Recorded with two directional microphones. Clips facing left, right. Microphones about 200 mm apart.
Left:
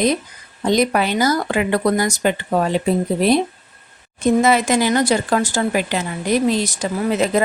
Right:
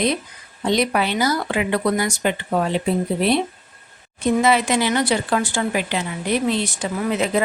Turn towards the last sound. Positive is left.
turn(degrees=40)  # may be behind; listen again after turning